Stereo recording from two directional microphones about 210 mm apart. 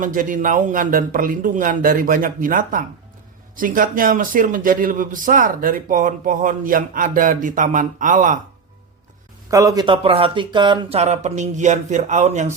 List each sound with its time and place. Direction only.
0.0 s a man's voice: 40° right (ahead or behind)
9.5 s speech: 15° right (ahead or behind); by 12.5 s 35° right (ahead or behind)